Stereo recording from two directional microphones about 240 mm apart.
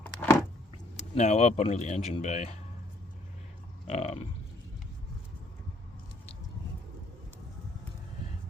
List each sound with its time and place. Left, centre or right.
0.0 s a sound: centre
0.9 s speech: left
3.8 s speech: left